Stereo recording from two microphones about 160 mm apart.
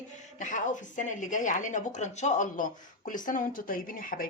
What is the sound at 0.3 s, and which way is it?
A woman's voice, 50° left (ahead or behind).